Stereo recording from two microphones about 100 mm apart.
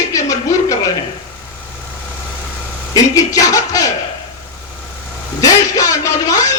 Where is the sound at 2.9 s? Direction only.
35° left (ahead or behind).